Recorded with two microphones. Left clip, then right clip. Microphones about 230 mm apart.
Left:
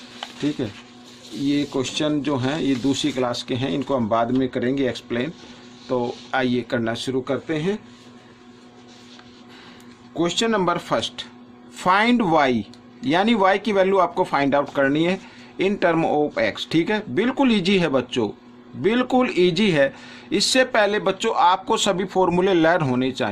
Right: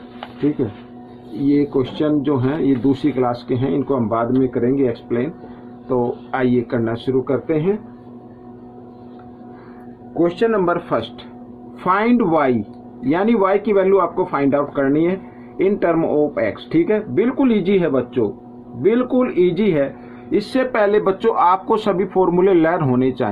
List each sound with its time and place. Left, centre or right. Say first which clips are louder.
0.6 s speech: right 6 dB; left
10.2 s speech: right 4 dB; left
20.3 s speech: even; left